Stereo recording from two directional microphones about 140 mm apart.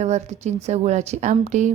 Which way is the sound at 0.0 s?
55° right (ahead or behind).